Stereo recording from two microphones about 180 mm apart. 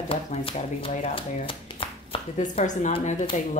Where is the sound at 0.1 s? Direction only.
30° left (ahead or behind).